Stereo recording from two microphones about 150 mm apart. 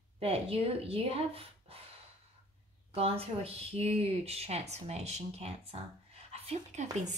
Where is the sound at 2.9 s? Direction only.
40° right (ahead or behind).